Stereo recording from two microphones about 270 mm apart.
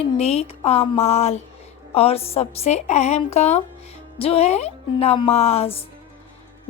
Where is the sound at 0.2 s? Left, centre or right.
Left.